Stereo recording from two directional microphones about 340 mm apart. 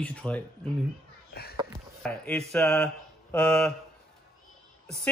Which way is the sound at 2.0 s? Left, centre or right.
Centre.